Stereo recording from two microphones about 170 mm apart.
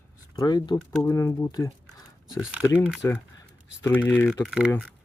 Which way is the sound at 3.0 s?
15° left (ahead or behind).